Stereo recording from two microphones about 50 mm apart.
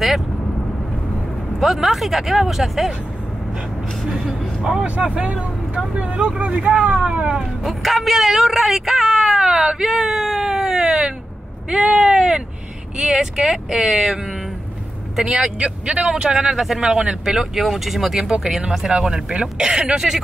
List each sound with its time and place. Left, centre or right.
1.6 s speech: centre
4.1 s vehicle: centre
4.8 s speech: right
7.6 s speech: centre; by 16.1 s right
16.1 s speech: centre
16.9 s speech: centre
17.6 s speech: centre